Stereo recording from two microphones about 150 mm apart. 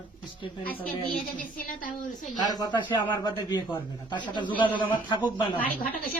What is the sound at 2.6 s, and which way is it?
A man's voice, 30° left (ahead or behind).